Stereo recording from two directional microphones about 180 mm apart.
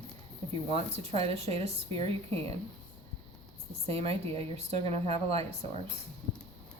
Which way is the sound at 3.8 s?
35° right (ahead or behind).